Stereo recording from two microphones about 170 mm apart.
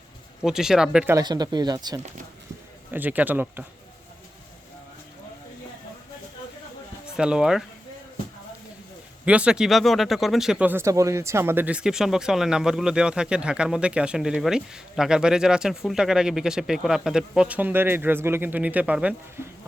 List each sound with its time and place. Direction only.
0.4 s speech: 5° right (ahead or behind)
1.1 s speech: 25° right (ahead or behind)
2.9 s speech: 10° right (ahead or behind)
7.2 s speech: 5° right (ahead or behind)
9.2 s speech: 5° right (ahead or behind)